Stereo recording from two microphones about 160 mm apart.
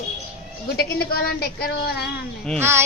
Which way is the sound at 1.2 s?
75° left (ahead or behind).